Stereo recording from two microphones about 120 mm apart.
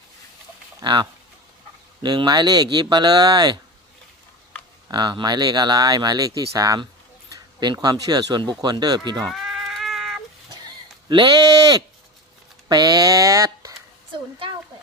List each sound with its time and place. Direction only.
0.8 s speech: 40° right (ahead or behind)
2.0 s speech: 35° right (ahead or behind)
4.9 s speech: 40° right (ahead or behind)
9.2 s cat: centre (ahead or behind)
11.1 s speech: 35° right (ahead or behind)